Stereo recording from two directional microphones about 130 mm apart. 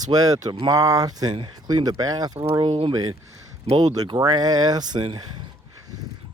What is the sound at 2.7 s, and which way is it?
Speech, 45° right (ahead or behind).